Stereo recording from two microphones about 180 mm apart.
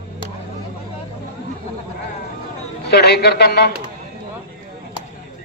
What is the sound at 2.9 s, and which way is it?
Speech, 65° left (ahead or behind).